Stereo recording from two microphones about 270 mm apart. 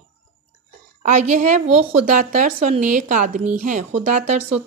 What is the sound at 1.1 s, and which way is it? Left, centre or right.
Speech, right.